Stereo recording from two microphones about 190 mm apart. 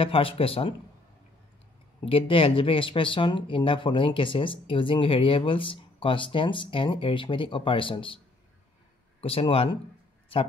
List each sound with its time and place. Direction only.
0.0 s speech: 30° left (ahead or behind)
2.0 s speech: 30° left (ahead or behind)
9.2 s speech: 30° left (ahead or behind)